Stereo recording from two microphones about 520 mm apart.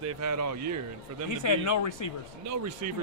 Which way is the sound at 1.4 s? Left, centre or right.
Left.